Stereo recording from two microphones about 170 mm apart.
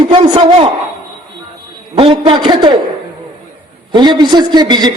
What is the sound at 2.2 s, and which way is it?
Speech, 30° right (ahead or behind).